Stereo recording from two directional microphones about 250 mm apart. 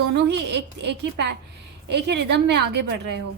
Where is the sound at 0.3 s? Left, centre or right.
Right.